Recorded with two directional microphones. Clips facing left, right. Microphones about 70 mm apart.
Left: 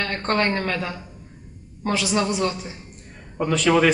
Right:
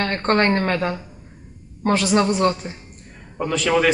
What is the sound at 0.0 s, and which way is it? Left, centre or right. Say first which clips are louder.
Speech: right 4 dB; right.